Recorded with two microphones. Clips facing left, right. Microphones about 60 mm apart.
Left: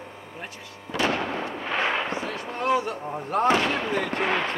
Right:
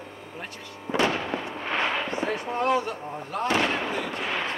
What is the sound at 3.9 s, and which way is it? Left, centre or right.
Gunshot, left.